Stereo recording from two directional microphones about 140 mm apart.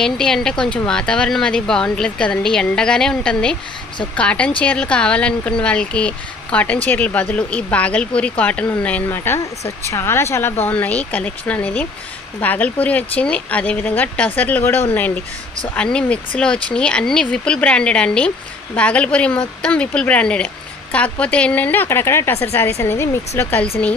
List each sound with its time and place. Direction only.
0.0 s speech: 5° left (ahead or behind)